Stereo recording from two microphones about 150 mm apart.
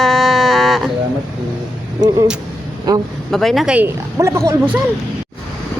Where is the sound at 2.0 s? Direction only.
20° right (ahead or behind).